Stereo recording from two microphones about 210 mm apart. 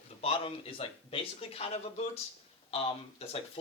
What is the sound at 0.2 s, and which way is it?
Speech, 25° left (ahead or behind).